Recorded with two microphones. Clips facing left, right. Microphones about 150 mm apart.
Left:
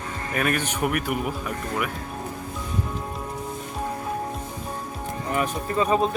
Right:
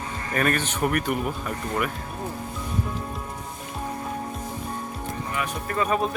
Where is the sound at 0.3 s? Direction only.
10° left (ahead or behind).